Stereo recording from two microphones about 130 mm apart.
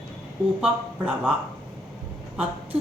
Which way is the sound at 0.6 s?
10° right (ahead or behind).